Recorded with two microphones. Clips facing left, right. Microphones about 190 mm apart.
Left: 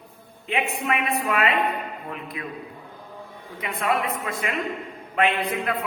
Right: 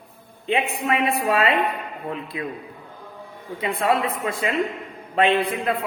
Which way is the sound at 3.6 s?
30° right (ahead or behind).